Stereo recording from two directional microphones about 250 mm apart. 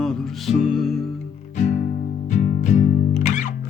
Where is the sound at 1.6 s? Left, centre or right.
Left.